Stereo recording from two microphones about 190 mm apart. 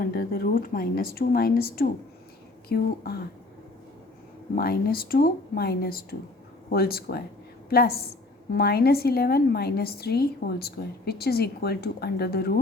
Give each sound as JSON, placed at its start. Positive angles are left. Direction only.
{"t": 0.0, "sound": "a woman's voice", "side_deg": 55}
{"t": 4.5, "sound": "a woman's voice", "side_deg": 50}